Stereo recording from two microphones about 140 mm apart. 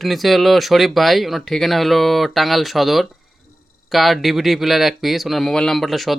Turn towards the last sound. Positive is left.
turn(degrees=0)  # may be behind; listen again after turning